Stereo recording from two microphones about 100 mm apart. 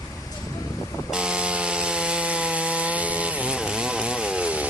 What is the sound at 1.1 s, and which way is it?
Sawing, 10° right (ahead or behind).